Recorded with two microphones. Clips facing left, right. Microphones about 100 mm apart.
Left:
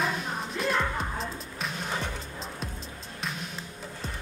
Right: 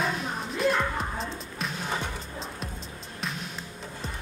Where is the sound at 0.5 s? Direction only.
Centre (ahead or behind).